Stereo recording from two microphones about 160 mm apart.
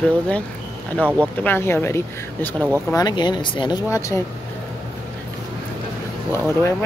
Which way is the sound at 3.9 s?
20° left (ahead or behind).